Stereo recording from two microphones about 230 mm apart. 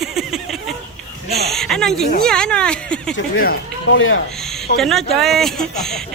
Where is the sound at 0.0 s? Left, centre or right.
Centre.